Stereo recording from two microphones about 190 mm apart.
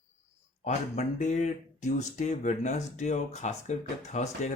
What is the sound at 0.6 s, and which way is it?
Speech, 35° left (ahead or behind).